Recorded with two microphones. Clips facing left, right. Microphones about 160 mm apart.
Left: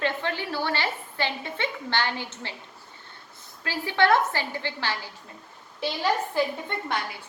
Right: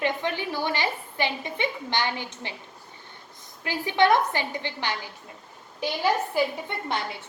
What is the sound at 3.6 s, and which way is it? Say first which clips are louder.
A woman's voice: right 2 dB; 15° right (ahead or behind).